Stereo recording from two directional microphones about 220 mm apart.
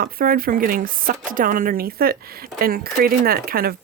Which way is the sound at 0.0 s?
40° right (ahead or behind).